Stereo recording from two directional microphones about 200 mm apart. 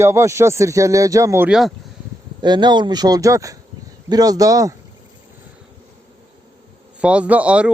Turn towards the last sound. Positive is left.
turn(degrees=-5)  # may be behind; listen again after turning